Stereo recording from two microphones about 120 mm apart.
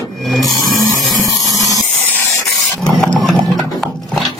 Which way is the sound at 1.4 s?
30° right (ahead or behind).